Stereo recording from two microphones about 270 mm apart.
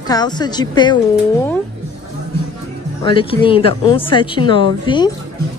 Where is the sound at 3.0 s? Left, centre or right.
Centre.